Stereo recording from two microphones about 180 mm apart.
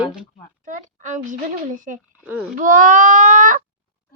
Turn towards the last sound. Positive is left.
turn(degrees=-45)  # may be behind; listen again after turning